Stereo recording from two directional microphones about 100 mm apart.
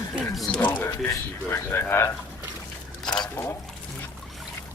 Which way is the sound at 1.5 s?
20° left (ahead or behind).